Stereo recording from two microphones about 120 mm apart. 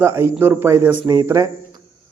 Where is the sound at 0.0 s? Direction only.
20° right (ahead or behind).